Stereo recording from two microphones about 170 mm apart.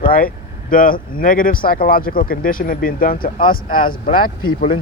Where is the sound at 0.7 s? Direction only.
55° left (ahead or behind).